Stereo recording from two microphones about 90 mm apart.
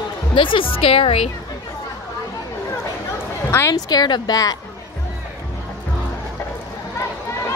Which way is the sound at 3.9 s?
50° left (ahead or behind).